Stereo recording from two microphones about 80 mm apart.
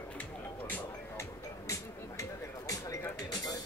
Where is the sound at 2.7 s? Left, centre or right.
Left.